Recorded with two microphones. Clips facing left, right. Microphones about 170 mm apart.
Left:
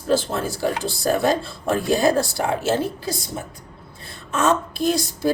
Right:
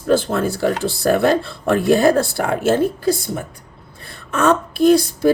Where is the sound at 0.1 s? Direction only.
55° right (ahead or behind).